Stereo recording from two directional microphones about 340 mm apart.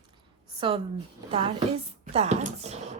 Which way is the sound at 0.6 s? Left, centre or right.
Centre.